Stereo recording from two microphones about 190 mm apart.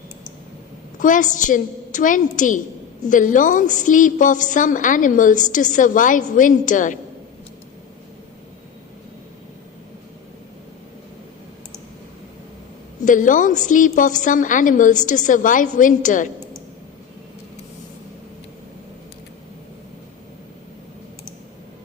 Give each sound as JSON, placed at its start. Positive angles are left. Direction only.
{"t": 0.9, "sound": "a woman's voice", "side_deg": 45}
{"t": 13.1, "sound": "a woman's voice", "side_deg": 45}